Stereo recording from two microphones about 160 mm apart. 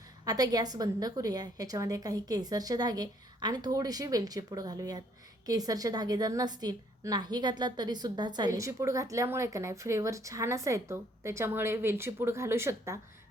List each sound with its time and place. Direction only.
0.3 s a woman's voice: 25° right (ahead or behind)